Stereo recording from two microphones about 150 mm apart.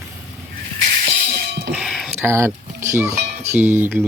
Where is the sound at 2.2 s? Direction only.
15° right (ahead or behind).